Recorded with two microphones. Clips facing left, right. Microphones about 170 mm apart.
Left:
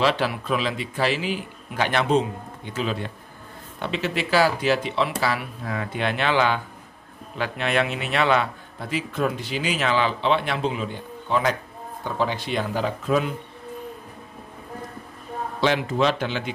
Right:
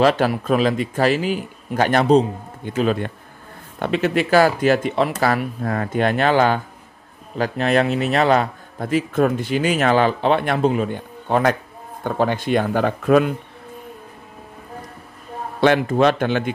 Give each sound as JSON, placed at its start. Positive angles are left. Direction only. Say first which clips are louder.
{"t": 0.0, "sound": "a man's voice", "louder": "right 6 dB", "side_deg": -45}
{"t": 15.6, "sound": "a man's voice", "louder": "right 6 dB", "side_deg": -55}